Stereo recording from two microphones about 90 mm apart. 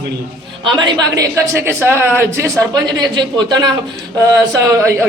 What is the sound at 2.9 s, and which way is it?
Speech, 55° right (ahead or behind).